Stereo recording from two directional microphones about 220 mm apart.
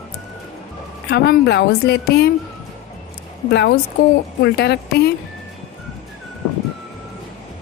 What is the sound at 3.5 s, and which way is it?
Speech, 50° left (ahead or behind).